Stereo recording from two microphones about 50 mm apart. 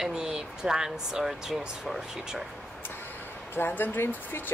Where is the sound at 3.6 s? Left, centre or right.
Left.